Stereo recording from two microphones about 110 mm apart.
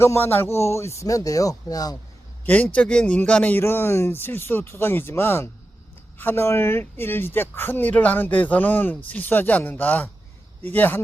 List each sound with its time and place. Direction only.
0.0 s speech: 20° left (ahead or behind)
2.5 s speech: 15° left (ahead or behind)